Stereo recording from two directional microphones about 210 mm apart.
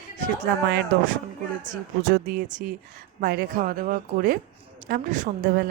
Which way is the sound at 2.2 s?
40° right (ahead or behind).